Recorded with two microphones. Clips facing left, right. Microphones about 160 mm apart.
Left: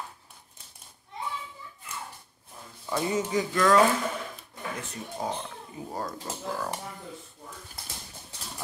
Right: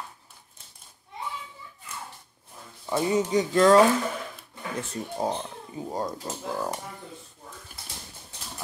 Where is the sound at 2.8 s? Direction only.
20° right (ahead or behind).